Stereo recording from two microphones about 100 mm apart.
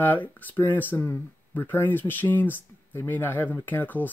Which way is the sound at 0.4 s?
20° left (ahead or behind).